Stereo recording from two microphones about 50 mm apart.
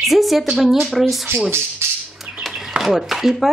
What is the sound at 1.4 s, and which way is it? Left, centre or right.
Speech, right.